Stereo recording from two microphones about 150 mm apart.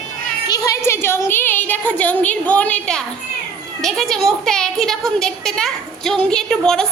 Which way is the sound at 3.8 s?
Centre (ahead or behind).